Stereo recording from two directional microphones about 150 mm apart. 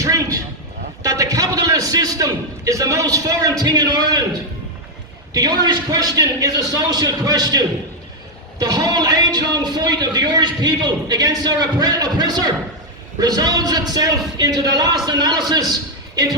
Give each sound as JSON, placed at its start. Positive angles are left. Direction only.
{"t": 0.0, "sound": "a sound", "side_deg": -20}
{"t": 1.0, "sound": "a man's voice", "side_deg": -20}
{"t": 5.3, "sound": "speech", "side_deg": -25}